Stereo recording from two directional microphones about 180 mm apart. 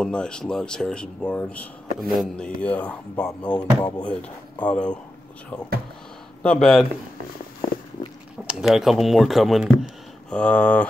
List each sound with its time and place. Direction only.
0.0 s speech: 5° left (ahead or behind)
3.4 s speech: 25° left (ahead or behind)
4.0 s speech: 5° left (ahead or behind)
6.4 s speech: 5° left (ahead or behind)
8.5 s speech: 5° right (ahead or behind)